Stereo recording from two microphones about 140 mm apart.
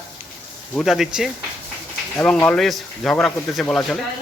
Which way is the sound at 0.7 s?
Centre (ahead or behind).